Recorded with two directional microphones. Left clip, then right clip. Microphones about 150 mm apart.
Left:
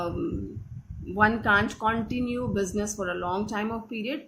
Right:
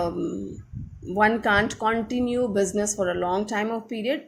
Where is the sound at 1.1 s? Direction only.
40° right (ahead or behind).